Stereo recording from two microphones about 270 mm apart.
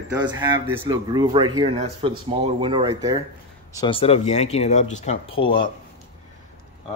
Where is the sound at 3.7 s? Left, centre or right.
Centre.